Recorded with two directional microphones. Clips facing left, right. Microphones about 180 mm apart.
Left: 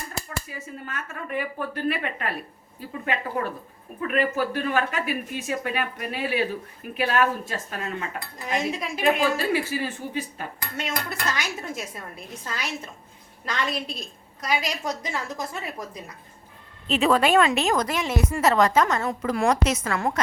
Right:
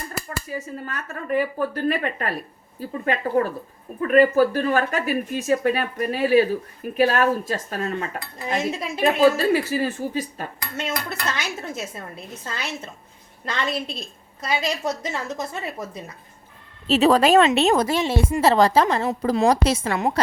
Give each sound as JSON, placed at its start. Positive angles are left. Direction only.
{"t": 0.5, "sound": "a woman's voice", "side_deg": -40}
{"t": 8.4, "sound": "a woman's voice", "side_deg": -30}
{"t": 9.2, "sound": "speech", "side_deg": -40}
{"t": 11.3, "sound": "a woman's voice", "side_deg": -25}
{"t": 16.8, "sound": "a woman's voice", "side_deg": -35}